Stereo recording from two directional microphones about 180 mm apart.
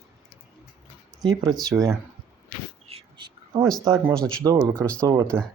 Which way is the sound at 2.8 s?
30° right (ahead or behind).